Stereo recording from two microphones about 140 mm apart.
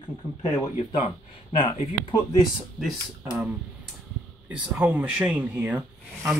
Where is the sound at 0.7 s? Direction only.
50° left (ahead or behind).